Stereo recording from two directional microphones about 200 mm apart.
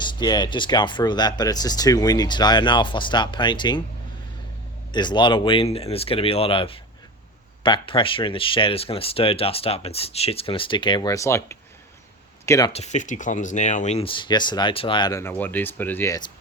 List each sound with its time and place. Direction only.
0.0 s speech: 20° left (ahead or behind)
4.9 s speech: 20° left (ahead or behind)
12.7 s speech: 35° left (ahead or behind); by 16.3 s 15° left (ahead or behind)